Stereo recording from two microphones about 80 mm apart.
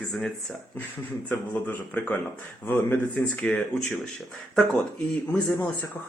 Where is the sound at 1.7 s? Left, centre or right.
Left.